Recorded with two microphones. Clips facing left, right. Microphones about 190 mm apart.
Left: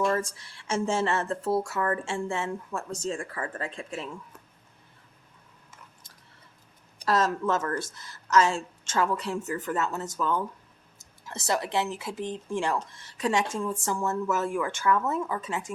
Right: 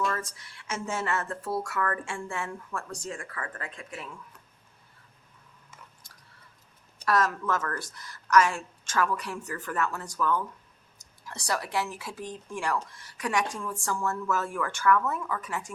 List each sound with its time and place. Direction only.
0.0 s speech: 30° left (ahead or behind)
7.1 s speech: 25° left (ahead or behind)